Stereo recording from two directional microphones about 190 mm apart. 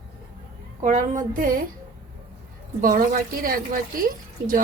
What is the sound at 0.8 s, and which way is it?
Speech, 40° right (ahead or behind).